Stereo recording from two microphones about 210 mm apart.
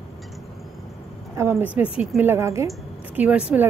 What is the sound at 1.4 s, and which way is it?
A woman's voice, 10° right (ahead or behind).